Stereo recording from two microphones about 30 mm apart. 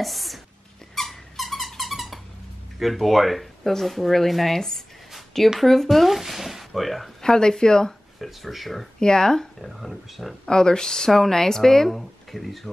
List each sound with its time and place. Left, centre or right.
0.0 s speech: centre
0.9 s a sound: centre
2.8 s speech: centre
5.9 s a sound: centre
7.2 s speech: left
8.2 s speech: centre
9.0 s speech: left
9.6 s speech: centre
10.4 s speech: left
11.1 s speech: centre
11.9 s speech: centre